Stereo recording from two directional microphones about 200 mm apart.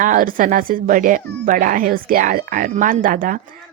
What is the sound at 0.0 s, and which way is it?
Speech, 40° right (ahead or behind).